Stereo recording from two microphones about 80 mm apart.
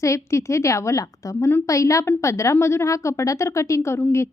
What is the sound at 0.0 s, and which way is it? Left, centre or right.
A woman's voice, left.